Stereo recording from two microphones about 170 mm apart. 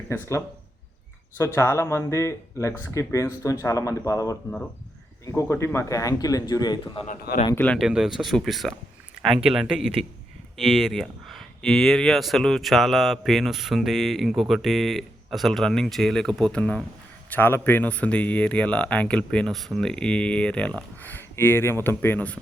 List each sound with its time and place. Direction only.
0.1 s speech: 15° left (ahead or behind)
1.5 s speech: 15° left (ahead or behind)
7.1 s speech: 50° left (ahead or behind)
7.5 s speech: 10° left (ahead or behind)
7.8 s speech: 5° right (ahead or behind)